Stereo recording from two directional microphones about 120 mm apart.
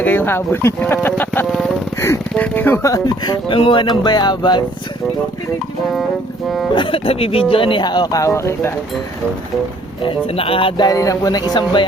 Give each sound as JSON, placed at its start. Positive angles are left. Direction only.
{"t": 0.0, "sound": "speech", "side_deg": 15}
{"t": 1.5, "sound": "speech", "side_deg": 5}
{"t": 2.3, "sound": "speech", "side_deg": 15}
{"t": 2.9, "sound": "speech", "side_deg": 35}
{"t": 6.7, "sound": "speech", "side_deg": 45}
{"t": 10.0, "sound": "speech", "side_deg": 50}
{"t": 10.8, "sound": "speech", "side_deg": 30}